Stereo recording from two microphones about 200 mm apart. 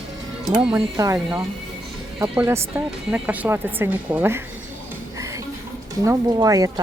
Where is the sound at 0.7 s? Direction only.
15° right (ahead or behind).